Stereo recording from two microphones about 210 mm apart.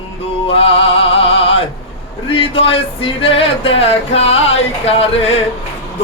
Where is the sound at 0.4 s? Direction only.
25° left (ahead or behind).